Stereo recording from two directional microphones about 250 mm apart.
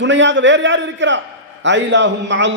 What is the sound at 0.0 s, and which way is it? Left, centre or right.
A man's voice, right.